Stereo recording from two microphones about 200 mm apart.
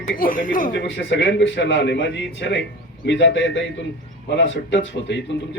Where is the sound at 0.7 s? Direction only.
65° left (ahead or behind).